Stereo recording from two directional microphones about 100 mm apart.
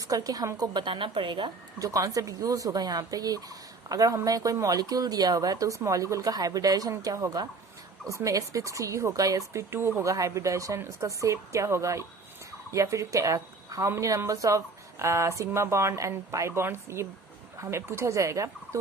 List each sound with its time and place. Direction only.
0.0 s a woman's voice: 35° right (ahead or behind); by 1.5 s 55° right (ahead or behind)
1.8 s speech: 35° right (ahead or behind)